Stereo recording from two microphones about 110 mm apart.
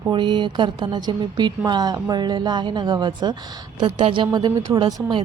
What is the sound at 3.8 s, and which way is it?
A woman's voice, 55° right (ahead or behind).